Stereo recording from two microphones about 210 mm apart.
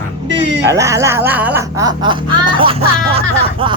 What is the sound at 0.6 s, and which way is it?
Speech, 15° right (ahead or behind).